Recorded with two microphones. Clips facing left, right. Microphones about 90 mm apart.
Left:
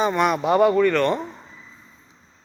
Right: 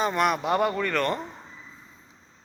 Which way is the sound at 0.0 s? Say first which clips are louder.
Left 4 dB; centre (ahead or behind).